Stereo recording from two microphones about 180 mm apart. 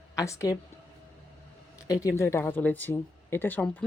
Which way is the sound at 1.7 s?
20° left (ahead or behind).